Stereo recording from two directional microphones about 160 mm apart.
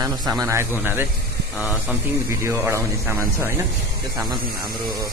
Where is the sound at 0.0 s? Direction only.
20° right (ahead or behind).